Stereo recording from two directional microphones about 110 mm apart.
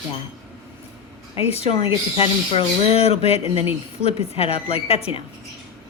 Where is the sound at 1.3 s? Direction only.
60° left (ahead or behind).